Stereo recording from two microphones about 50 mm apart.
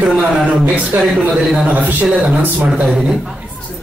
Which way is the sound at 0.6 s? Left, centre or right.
Right.